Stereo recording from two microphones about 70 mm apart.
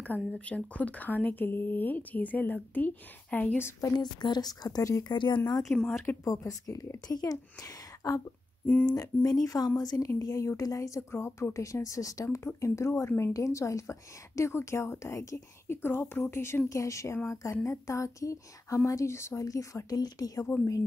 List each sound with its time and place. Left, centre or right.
0.7 s speech: left
3.9 s speech: left
5.0 s speech: left
5.6 s speech: centre
6.2 s a woman's voice: left
19.4 s a woman's voice: left
20.0 s speech: left